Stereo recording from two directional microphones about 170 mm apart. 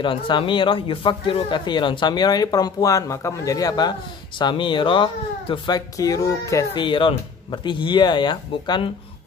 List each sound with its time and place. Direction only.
0.0 s speech: 30° left (ahead or behind)